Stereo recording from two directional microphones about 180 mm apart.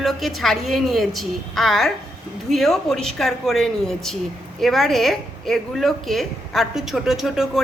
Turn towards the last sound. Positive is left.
turn(degrees=0)  # may be behind; listen again after turning